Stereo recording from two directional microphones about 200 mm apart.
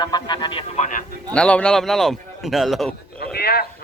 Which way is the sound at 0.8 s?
40° left (ahead or behind).